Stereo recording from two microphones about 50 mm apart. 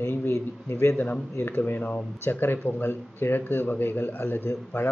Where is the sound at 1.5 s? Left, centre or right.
Left.